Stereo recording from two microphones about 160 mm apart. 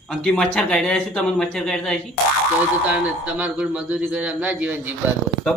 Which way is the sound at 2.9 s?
10° right (ahead or behind).